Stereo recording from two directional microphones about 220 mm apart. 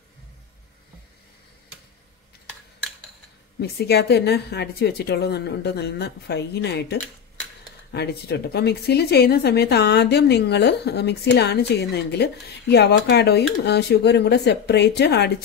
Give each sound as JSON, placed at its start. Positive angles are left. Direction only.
{"t": 3.5, "sound": "speech", "side_deg": 45}